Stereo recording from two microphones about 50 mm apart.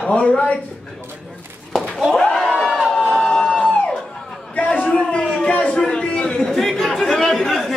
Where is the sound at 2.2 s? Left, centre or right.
Centre.